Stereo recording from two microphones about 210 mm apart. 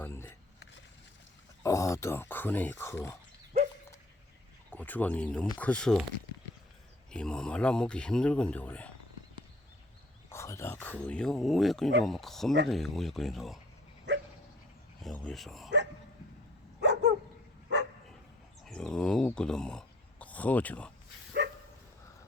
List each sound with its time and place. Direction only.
0.0 s a sound: 10° left (ahead or behind)
1.6 s speech: 15° left (ahead or behind)
4.7 s speech: 10° left (ahead or behind)
7.1 s speech: 5° left (ahead or behind)
10.2 s speech: 15° left (ahead or behind)
14.1 s dog: 55° right (ahead or behind)
15.0 s speech: centre (ahead or behind)
16.8 s dog: 55° right (ahead or behind)
18.6 s speech: 5° left (ahead or behind)